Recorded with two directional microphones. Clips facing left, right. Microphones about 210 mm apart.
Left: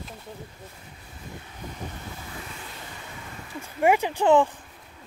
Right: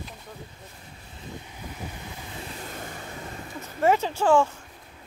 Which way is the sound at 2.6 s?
45° right (ahead or behind).